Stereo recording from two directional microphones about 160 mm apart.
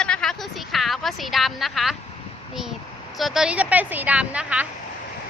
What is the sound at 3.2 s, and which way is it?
A woman's voice, centre (ahead or behind).